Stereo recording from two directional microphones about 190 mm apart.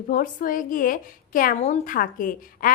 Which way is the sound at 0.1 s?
45° left (ahead or behind).